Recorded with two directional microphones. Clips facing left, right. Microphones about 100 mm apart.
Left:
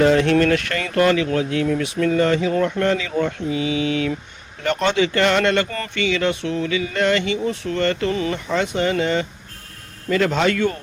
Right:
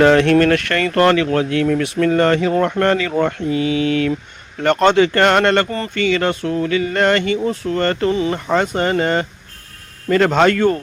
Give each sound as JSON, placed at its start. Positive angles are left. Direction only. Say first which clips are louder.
{"t": 0.0, "sound": "speech", "louder": "right 4 dB", "side_deg": -65}
{"t": 7.4, "sound": "speech", "louder": "right 3 dB", "side_deg": -40}
{"t": 8.1, "sound": "speech", "louder": "right 4 dB", "side_deg": -25}
{"t": 8.4, "sound": "speech", "louder": "right 3 dB", "side_deg": -45}